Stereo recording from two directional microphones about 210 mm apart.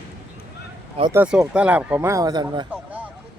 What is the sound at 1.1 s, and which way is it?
Speech, 5° right (ahead or behind).